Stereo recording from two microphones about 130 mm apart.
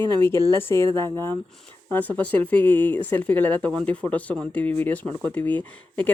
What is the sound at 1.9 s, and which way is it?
Speech, 15° left (ahead or behind).